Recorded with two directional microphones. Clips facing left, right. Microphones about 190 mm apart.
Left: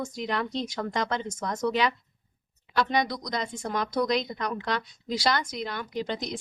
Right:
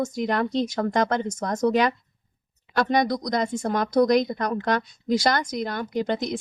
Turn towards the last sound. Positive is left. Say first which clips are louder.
# right 6 dB
turn(degrees=-50)  # may be behind; listen again after turning